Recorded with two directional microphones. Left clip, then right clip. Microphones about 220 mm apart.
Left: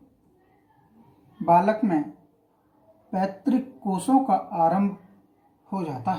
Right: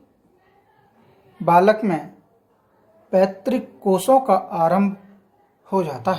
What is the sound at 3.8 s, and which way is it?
A woman's voice, 35° right (ahead or behind).